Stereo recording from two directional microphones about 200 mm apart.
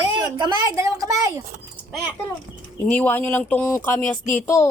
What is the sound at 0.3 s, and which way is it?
Speech, 20° right (ahead or behind).